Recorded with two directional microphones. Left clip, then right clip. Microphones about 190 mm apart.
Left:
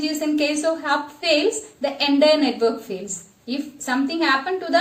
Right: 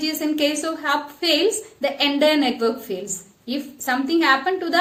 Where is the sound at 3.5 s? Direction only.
40° right (ahead or behind).